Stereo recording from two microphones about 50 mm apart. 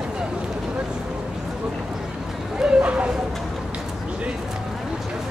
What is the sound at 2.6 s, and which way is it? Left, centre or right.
Bow-wow, right.